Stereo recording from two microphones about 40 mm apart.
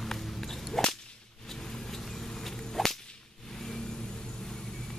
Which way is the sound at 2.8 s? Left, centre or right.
Centre.